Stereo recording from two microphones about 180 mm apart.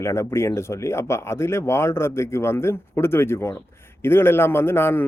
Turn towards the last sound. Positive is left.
turn(degrees=15)  # may be behind; listen again after turning